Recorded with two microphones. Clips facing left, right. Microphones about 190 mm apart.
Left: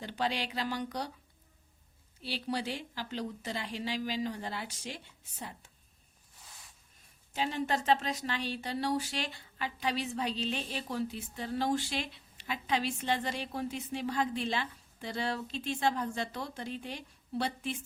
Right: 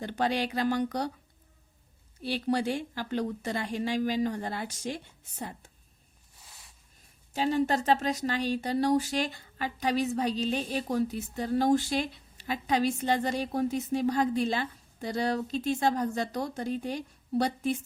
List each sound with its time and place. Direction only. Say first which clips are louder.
0.0 s speech: right 5 dB; 50° right (ahead or behind)
2.2 s speech: right 7 dB; 50° right (ahead or behind)
7.3 s speech: right 6 dB; 40° right (ahead or behind)